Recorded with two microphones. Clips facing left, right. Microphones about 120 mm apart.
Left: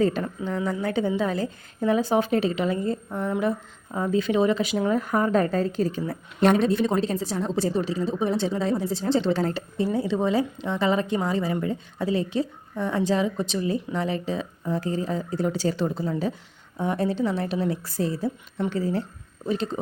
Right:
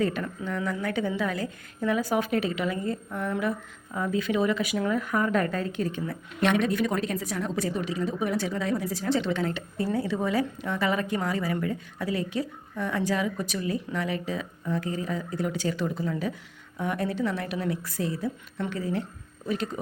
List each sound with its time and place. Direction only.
0.0 s a woman's voice: 30° left (ahead or behind)
9.7 s a woman's voice: 25° left (ahead or behind)